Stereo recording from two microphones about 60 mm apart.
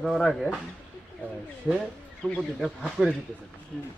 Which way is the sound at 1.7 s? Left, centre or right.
Centre.